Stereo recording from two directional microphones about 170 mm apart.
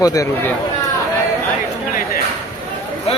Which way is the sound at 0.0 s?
20° left (ahead or behind).